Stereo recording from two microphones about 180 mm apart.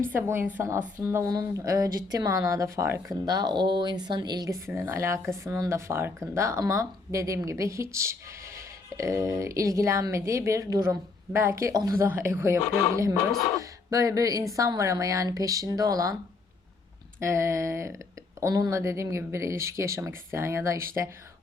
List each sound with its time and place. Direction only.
0.1 s speech: 15° right (ahead or behind)
13.6 s a sound: 20° right (ahead or behind)
14.5 s speech: 20° right (ahead or behind)
17.2 s speech: 15° right (ahead or behind)